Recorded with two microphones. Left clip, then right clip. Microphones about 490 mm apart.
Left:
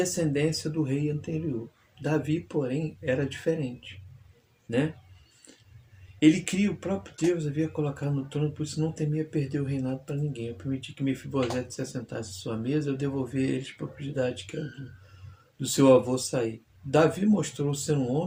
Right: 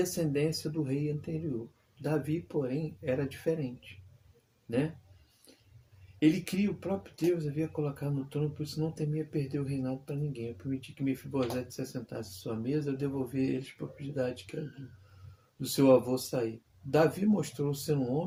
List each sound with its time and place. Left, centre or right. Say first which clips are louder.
0.0 s speech: left 4 dB; right
6.1 s speech: left 6 dB; right
15.6 s speech: left 4 dB; right